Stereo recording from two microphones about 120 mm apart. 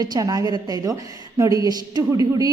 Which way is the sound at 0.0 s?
35° right (ahead or behind).